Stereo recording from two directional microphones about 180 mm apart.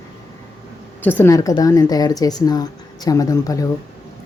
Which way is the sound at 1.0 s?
10° left (ahead or behind).